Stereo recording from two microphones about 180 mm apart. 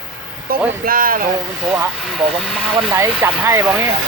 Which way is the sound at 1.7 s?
5° right (ahead or behind).